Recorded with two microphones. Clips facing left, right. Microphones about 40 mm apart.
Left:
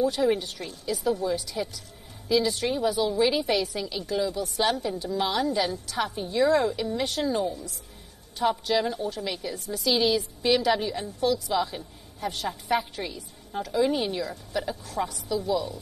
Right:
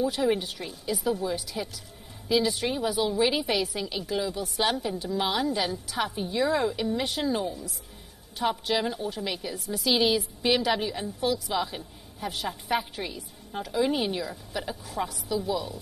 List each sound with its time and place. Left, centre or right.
0.0 s a woman's voice: centre